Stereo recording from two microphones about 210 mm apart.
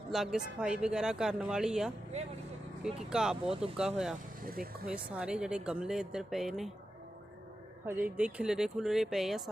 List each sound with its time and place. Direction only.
0.1 s speech: centre (ahead or behind)
4.4 s vehicle: 45° right (ahead or behind)
4.9 s speech: 5° right (ahead or behind)
7.9 s speech: 5° right (ahead or behind)